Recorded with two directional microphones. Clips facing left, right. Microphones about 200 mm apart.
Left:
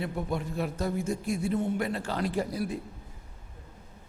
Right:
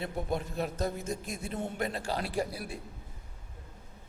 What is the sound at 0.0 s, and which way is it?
A man's voice, 20° right (ahead or behind).